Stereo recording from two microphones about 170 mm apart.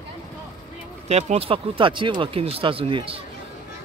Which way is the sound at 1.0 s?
40° right (ahead or behind).